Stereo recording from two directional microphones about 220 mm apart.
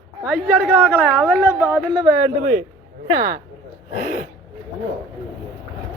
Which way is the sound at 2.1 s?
40° right (ahead or behind).